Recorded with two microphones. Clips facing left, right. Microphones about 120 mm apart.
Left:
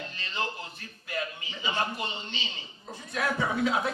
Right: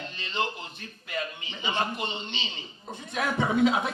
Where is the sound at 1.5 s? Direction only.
20° right (ahead or behind).